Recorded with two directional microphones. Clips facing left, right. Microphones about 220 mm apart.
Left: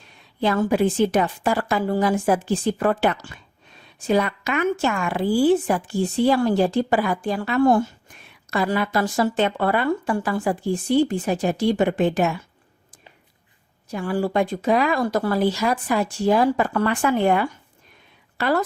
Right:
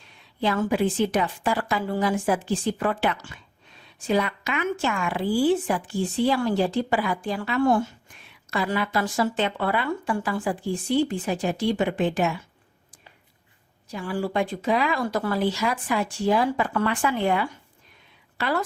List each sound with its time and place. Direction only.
0.4 s a woman's voice: 40° left (ahead or behind)
13.9 s a woman's voice: 45° left (ahead or behind)